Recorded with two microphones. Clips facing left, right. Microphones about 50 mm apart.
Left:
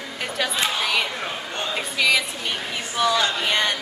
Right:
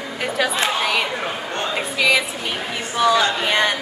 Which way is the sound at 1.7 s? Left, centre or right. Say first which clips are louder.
Right 2 dB; centre.